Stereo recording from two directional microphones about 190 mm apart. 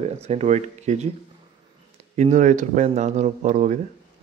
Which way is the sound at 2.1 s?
40° right (ahead or behind).